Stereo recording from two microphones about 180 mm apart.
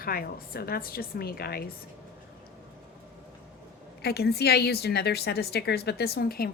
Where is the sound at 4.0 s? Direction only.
65° left (ahead or behind).